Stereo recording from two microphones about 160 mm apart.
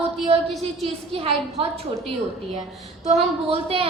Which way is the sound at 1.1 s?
40° right (ahead or behind).